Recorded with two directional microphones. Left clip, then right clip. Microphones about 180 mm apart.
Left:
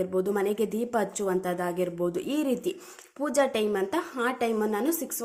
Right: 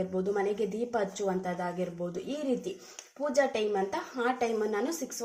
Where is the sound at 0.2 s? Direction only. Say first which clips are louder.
Left 2 dB; 35° left (ahead or behind).